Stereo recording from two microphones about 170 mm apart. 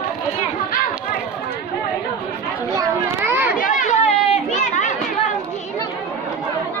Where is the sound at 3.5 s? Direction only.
50° left (ahead or behind).